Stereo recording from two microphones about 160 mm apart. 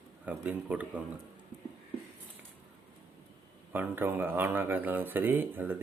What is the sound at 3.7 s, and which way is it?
Speech, 15° right (ahead or behind).